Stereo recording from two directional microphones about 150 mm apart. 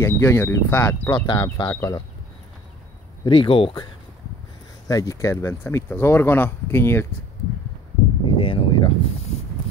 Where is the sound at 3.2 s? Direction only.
35° left (ahead or behind).